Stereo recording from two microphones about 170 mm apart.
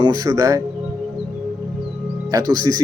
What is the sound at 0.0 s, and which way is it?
Speech, 20° right (ahead or behind).